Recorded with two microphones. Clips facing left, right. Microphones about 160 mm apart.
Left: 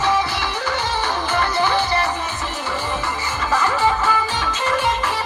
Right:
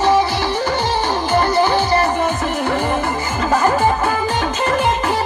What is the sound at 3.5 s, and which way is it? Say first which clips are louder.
Music: right 4 dB; 45° right (ahead or behind).